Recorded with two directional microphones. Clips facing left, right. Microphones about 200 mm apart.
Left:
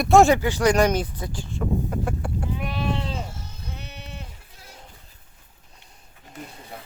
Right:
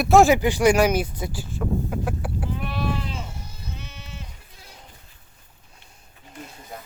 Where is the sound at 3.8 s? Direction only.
60° left (ahead or behind).